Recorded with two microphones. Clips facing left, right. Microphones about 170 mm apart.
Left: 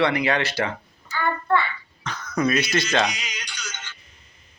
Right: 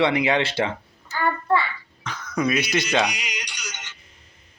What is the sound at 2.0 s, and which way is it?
Speech, 10° right (ahead or behind).